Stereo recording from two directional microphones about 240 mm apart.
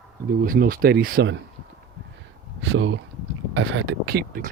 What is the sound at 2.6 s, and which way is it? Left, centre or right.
Speech, right.